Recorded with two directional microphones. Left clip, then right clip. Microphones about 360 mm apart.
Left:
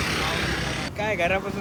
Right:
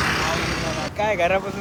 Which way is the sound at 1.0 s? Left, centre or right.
Centre.